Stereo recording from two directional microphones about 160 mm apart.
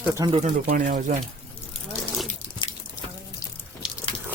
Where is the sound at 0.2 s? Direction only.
20° right (ahead or behind).